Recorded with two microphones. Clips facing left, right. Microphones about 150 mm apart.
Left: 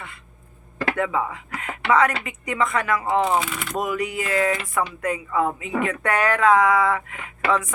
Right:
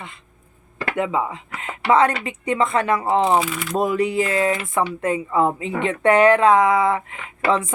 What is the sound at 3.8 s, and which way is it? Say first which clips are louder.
Speech: right 6 dB; 30° right (ahead or behind).